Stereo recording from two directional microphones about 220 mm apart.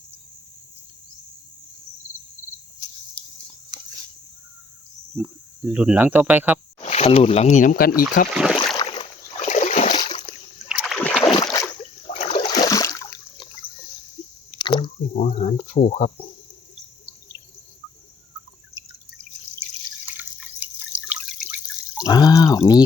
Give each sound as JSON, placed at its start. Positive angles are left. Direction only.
{"t": 3.7, "sound": "a sound", "side_deg": -20}
{"t": 5.1, "sound": "speech", "side_deg": -5}
{"t": 6.7, "sound": "speech", "side_deg": 30}
{"t": 8.3, "sound": "speech", "side_deg": 0}
{"t": 8.8, "sound": "splash", "side_deg": 25}
{"t": 9.9, "sound": "splash", "side_deg": 20}
{"t": 10.7, "sound": "rowboat", "side_deg": 0}
{"t": 11.5, "sound": "boat", "side_deg": 15}
{"t": 12.1, "sound": "toilet flush", "side_deg": 25}
{"t": 14.6, "sound": "drip", "side_deg": 20}
{"t": 15.1, "sound": "a sound", "side_deg": 35}
{"t": 20.1, "sound": "drip", "side_deg": -10}
{"t": 22.0, "sound": "drip", "side_deg": 15}
{"t": 22.5, "sound": "speech", "side_deg": 15}